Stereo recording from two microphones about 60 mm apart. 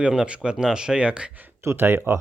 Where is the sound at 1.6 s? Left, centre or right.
Right.